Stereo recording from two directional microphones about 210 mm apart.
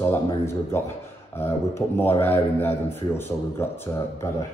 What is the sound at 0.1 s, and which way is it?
A man's voice, 10° left (ahead or behind).